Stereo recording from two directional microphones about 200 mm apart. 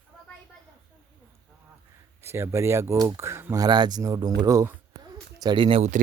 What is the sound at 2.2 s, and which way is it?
Speech, 15° right (ahead or behind).